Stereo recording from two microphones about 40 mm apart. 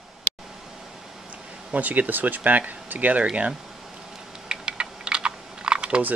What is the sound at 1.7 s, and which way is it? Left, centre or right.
Speech, right.